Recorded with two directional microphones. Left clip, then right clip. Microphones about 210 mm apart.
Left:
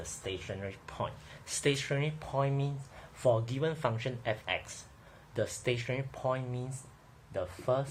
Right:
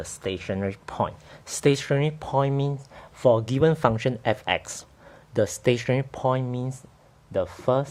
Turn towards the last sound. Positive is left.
turn(degrees=-50)  # may be behind; listen again after turning